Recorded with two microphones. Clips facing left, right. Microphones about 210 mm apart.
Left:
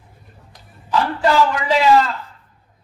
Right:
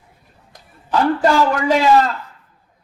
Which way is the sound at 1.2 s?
45° right (ahead or behind).